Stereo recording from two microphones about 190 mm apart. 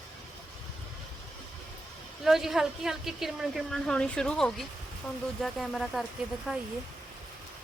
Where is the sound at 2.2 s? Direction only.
Centre (ahead or behind).